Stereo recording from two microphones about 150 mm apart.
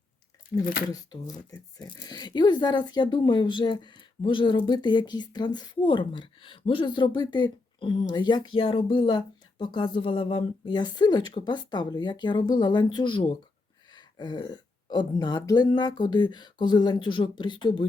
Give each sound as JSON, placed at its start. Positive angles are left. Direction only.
{"t": 0.9, "sound": "speech", "side_deg": 25}